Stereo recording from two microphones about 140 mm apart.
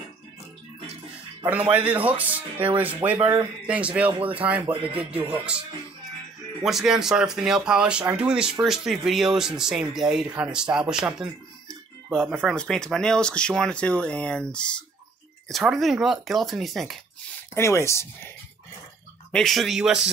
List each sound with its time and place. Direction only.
1.7 s speech: 10° right (ahead or behind)
6.6 s speech: centre (ahead or behind)
17.6 s speech: 20° left (ahead or behind)
19.3 s speech: centre (ahead or behind)